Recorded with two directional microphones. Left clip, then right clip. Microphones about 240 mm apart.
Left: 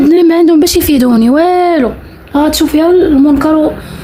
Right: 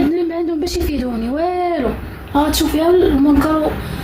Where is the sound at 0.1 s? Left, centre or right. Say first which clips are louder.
Left 12 dB; left.